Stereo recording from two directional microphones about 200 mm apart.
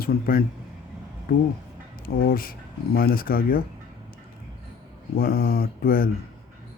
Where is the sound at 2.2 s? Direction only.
45° left (ahead or behind).